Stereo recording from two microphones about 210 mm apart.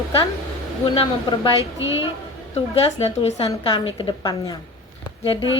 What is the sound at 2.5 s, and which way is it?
A woman's voice, 25° left (ahead or behind).